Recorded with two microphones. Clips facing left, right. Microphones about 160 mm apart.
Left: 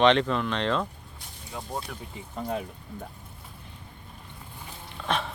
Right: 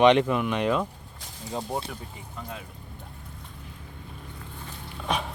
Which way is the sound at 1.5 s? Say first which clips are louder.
Right 4 dB; 30° right (ahead or behind).